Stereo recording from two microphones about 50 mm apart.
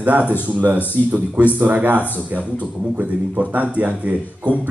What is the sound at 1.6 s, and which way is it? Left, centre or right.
A man's voice, right.